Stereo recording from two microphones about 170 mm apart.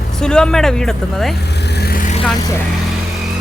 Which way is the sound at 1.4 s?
80° left.